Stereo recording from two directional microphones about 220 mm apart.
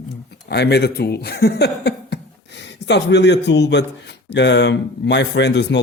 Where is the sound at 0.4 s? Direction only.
50° left (ahead or behind).